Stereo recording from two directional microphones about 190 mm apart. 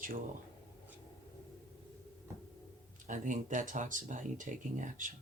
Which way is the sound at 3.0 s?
40° right (ahead or behind).